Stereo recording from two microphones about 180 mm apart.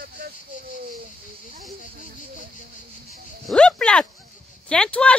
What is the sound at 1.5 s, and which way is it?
Speech, 55° right (ahead or behind).